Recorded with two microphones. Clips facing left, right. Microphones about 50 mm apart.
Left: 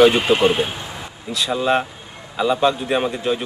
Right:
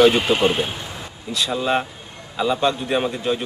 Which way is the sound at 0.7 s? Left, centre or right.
Centre.